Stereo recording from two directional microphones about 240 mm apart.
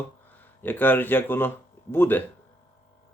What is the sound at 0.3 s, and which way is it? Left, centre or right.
Speech, centre.